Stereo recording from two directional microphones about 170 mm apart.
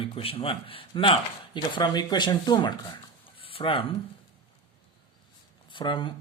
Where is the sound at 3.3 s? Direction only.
30° left (ahead or behind).